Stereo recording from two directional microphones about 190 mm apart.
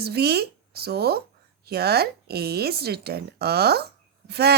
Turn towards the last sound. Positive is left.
turn(degrees=-60)  # may be behind; listen again after turning